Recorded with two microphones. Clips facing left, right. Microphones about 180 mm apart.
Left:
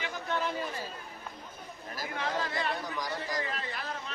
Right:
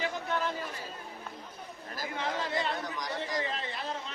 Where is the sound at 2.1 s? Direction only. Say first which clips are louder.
Right 1 dB; 20° right (ahead or behind).